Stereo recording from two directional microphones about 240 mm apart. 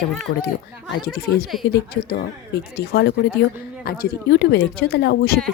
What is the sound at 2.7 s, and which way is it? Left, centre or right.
A woman's voice, left.